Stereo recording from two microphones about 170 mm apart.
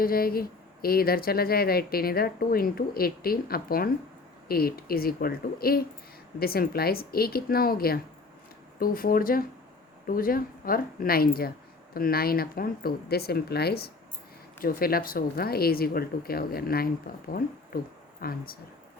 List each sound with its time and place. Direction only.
0.0 s speech: 60° left (ahead or behind)